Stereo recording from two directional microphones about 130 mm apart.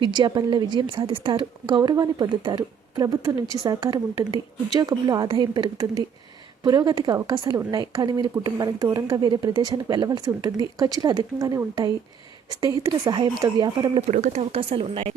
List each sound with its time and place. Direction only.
0.0 s a woman's voice: 35° right (ahead or behind)
14.1 s speech: 65° right (ahead or behind)
14.5 s speech: 45° right (ahead or behind)